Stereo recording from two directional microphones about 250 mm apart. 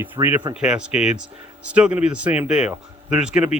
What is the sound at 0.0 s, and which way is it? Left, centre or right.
Speech, centre.